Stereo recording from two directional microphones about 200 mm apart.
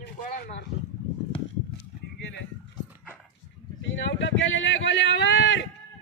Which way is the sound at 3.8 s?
65° left (ahead or behind).